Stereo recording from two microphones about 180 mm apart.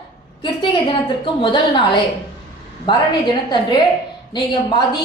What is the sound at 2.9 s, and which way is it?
Speech, 25° left (ahead or behind).